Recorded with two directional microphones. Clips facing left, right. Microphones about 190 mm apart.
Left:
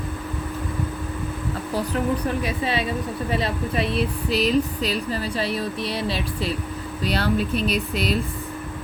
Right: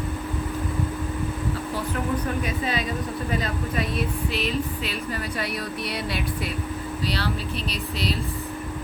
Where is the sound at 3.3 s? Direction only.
30° left (ahead or behind).